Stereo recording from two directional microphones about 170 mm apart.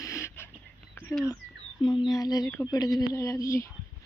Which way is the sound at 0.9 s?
15° left (ahead or behind).